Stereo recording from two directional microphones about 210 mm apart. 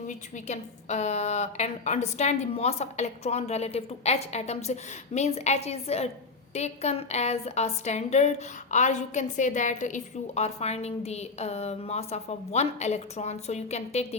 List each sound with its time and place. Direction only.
0.1 s a woman's voice: 35° left (ahead or behind)